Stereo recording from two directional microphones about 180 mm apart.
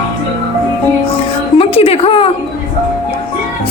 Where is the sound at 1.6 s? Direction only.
35° left (ahead or behind).